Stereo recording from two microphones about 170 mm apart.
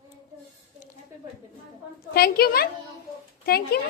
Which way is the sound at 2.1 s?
65° left (ahead or behind).